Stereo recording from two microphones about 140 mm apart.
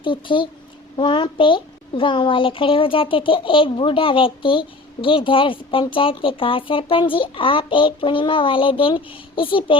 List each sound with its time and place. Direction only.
0.0 s a woman's voice: 35° left (ahead or behind)